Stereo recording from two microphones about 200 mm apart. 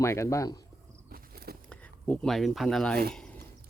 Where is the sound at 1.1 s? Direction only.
50° right (ahead or behind).